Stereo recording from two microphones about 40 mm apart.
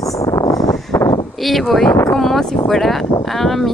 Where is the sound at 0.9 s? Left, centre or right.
Left.